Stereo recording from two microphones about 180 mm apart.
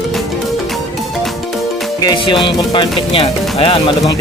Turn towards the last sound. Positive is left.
turn(degrees=30)  # may be behind; listen again after turning